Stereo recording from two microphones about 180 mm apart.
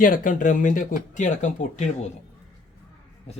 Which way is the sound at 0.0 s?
50° left (ahead or behind).